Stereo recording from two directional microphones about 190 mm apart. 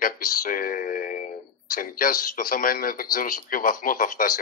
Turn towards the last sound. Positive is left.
turn(degrees=45)  # may be behind; listen again after turning